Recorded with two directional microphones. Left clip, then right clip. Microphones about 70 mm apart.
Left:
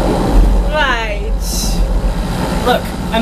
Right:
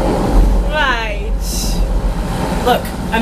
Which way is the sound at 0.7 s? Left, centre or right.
Centre.